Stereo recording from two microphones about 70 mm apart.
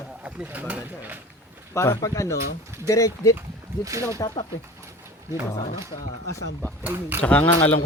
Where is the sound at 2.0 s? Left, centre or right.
Left.